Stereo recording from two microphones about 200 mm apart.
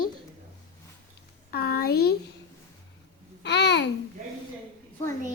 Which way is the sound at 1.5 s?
50° left (ahead or behind).